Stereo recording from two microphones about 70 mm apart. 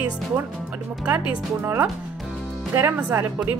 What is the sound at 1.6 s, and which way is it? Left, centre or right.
Speech, right.